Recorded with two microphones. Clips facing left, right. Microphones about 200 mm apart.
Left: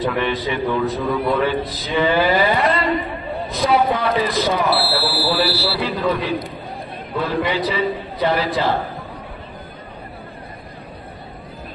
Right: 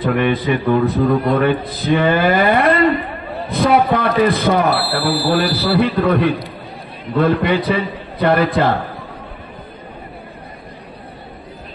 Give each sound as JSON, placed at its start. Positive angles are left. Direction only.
{"t": 0.0, "sound": "a man's voice", "side_deg": -55}